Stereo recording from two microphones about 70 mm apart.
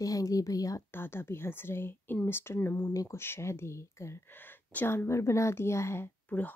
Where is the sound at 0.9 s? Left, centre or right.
Left.